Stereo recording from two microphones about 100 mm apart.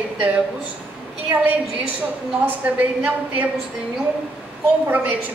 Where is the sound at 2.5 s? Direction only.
15° right (ahead or behind).